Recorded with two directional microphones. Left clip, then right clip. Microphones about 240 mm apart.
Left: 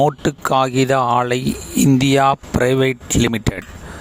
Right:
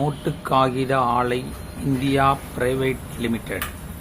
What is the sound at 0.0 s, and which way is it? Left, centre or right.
Speech, left.